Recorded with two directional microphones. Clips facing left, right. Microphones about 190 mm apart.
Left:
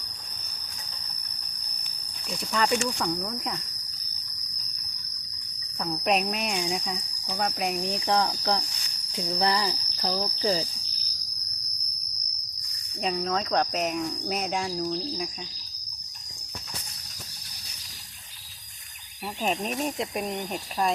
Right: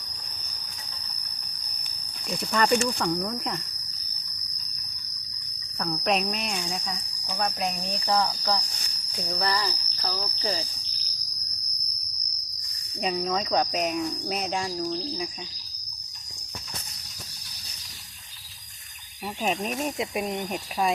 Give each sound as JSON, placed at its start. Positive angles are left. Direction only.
{"t": 2.4, "sound": "speech", "side_deg": 0}
{"t": 5.8, "sound": "speech", "side_deg": 10}
{"t": 13.0, "sound": "speech", "side_deg": -5}
{"t": 19.4, "sound": "speech", "side_deg": 0}